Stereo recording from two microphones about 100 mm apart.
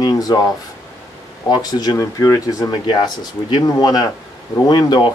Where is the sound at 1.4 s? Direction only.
45° left (ahead or behind).